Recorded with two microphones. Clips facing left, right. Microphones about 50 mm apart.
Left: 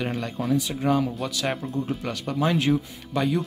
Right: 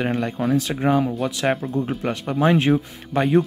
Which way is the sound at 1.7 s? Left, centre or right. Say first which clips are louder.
Right 5 dB; right.